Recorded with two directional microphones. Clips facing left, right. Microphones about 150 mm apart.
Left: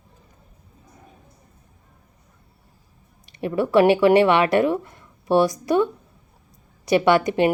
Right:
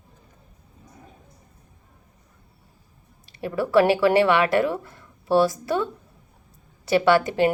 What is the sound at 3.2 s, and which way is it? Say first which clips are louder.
A woman's voice: left 3 dB; 20° left (ahead or behind).